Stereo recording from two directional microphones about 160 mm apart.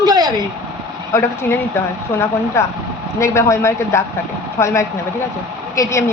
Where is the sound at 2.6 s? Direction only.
15° left (ahead or behind).